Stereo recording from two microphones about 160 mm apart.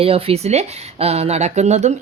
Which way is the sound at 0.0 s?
35° right (ahead or behind).